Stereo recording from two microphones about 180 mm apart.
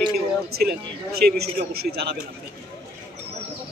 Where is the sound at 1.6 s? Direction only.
55° right (ahead or behind).